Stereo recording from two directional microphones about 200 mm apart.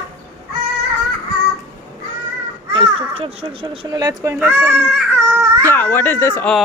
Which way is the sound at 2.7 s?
25° right (ahead or behind).